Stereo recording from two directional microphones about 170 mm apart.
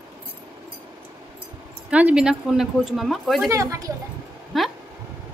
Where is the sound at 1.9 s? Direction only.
5° right (ahead or behind).